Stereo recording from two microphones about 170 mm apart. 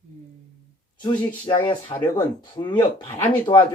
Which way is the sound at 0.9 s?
25° left (ahead or behind).